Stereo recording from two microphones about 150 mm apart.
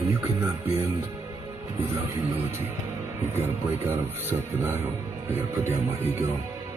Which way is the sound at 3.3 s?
15° right (ahead or behind).